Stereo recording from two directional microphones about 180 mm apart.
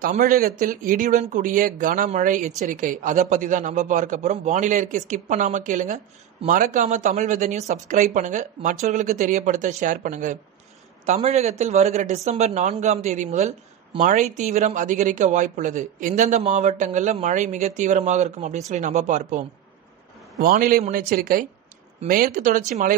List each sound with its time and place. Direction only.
0.0 s a woman's voice: 55° right (ahead or behind)
20.3 s speech: 50° right (ahead or behind)